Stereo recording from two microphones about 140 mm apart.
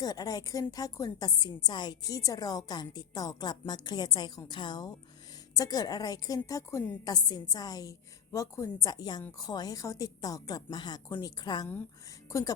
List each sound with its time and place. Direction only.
0.0 s a woman's voice: 25° left (ahead or behind)